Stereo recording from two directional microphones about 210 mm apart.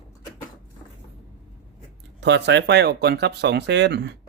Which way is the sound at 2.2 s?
55° right (ahead or behind).